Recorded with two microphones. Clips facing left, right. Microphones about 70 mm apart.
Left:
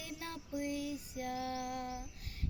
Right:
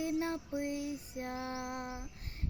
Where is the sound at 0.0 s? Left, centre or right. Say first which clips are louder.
Right 11 dB; right.